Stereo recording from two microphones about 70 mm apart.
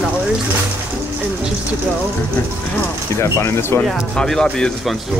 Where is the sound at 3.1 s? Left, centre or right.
Left.